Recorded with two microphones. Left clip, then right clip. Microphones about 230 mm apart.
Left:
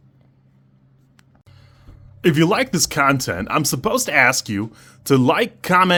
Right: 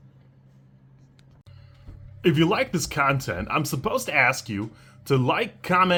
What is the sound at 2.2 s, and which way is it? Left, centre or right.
Speech, left.